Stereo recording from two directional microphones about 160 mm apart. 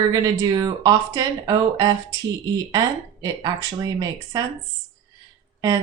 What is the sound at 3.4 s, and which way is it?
Speech, 25° right (ahead or behind).